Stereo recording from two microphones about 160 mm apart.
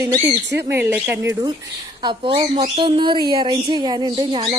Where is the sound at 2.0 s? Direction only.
30° right (ahead or behind).